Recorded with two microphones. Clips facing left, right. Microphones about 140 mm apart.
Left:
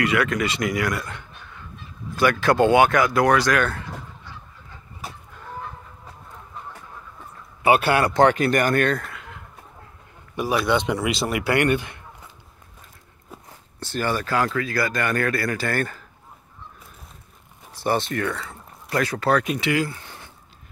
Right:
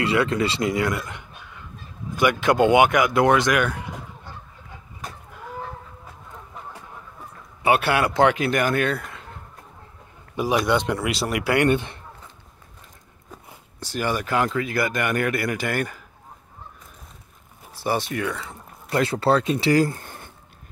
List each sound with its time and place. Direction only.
0.0 s speech: 30° right (ahead or behind)
4.3 s goose: 50° right (ahead or behind)
7.6 s speech: centre (ahead or behind)
9.1 s a sound: 30° right (ahead or behind)
10.3 s a man's voice: 15° right (ahead or behind)
10.6 s speech: centre (ahead or behind)
11.7 s speech: 25° right (ahead or behind)
13.5 s speech: 10° right (ahead or behind)
17.7 s speech: 10° right (ahead or behind)
18.4 s speech: 25° right (ahead or behind); by 20.2 s 50° right (ahead or behind)